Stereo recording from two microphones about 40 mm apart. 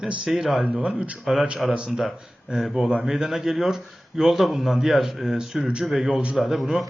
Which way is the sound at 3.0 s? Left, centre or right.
Centre.